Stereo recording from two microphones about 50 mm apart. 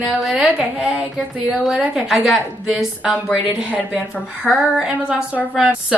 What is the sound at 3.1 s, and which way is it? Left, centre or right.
A woman's voice, centre.